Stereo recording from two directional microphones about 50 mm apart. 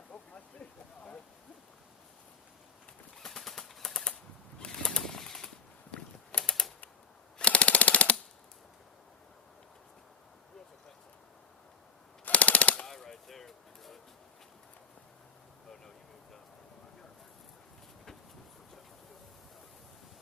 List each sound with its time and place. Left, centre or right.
0.1 s rain: left
3.2 s a sound: centre
3.8 s bird flight: centre
5.9 s mechanisms: centre
7.3 s machine gun: left
12.2 s machine gun: left
12.8 s a sound: centre